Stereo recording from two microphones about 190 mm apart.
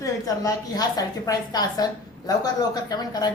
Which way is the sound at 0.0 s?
20° left (ahead or behind).